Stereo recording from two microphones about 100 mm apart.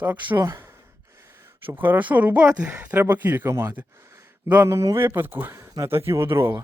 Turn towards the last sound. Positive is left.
turn(degrees=-25)  # may be behind; listen again after turning